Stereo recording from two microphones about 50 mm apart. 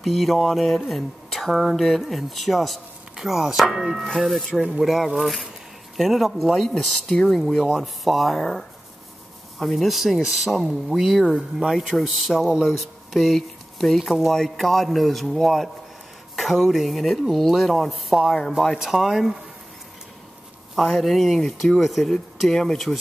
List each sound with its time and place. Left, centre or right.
0.0 s speech: centre
7.4 s speech: centre
20.7 s speech: centre